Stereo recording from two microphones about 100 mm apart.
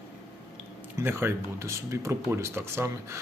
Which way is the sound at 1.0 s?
25° right (ahead or behind).